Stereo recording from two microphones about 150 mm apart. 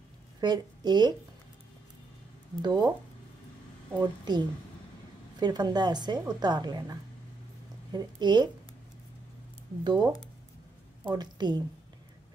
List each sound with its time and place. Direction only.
0.4 s a woman's voice: 30° right (ahead or behind)
2.6 s a woman's voice: 25° right (ahead or behind)
4.0 s a woman's voice: 30° right (ahead or behind)
9.8 s a woman's voice: 30° right (ahead or behind)